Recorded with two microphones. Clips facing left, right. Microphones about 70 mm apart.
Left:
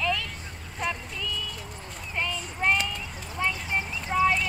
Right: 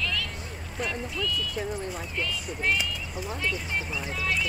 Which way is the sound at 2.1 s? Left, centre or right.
Left.